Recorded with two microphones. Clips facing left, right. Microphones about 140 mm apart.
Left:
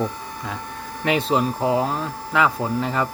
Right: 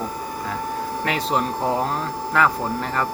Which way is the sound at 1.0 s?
15° left (ahead or behind).